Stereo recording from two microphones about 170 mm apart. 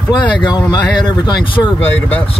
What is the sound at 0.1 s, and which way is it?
Speech, 25° left (ahead or behind).